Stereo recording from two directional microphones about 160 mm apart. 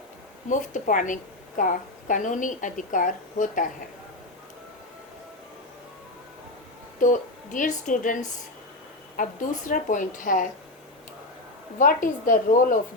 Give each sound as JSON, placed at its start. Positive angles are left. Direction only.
{"t": 0.7, "sound": "a woman's voice", "side_deg": 55}
{"t": 7.0, "sound": "a woman's voice", "side_deg": 55}
{"t": 11.8, "sound": "a woman's voice", "side_deg": 55}